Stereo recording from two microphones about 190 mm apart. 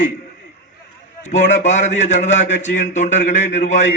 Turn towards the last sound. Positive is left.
turn(degrees=40)  # may be behind; listen again after turning